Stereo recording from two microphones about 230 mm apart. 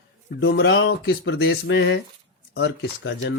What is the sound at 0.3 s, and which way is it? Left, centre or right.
Speech, left.